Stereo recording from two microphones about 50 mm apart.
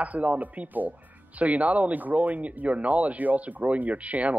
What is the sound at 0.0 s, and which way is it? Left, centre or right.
Speech, right.